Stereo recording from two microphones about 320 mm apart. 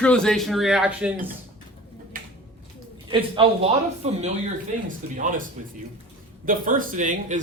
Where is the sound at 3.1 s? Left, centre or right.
Centre.